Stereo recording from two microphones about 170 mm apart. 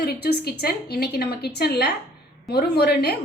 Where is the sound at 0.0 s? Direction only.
70° left (ahead or behind).